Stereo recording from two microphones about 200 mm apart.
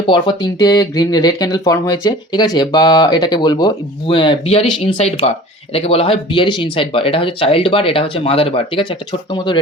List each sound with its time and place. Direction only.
0.1 s speech: 20° left (ahead or behind)